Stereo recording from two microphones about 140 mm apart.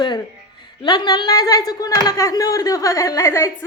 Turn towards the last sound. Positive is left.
turn(degrees=20)  # may be behind; listen again after turning